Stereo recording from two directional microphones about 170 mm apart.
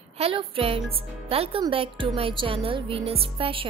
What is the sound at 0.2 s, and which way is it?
Speech, 35° right (ahead or behind).